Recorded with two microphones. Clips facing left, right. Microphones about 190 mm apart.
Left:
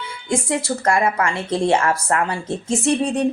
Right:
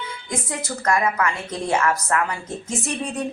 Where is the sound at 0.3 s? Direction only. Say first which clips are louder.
Left 8 dB; 30° left (ahead or behind).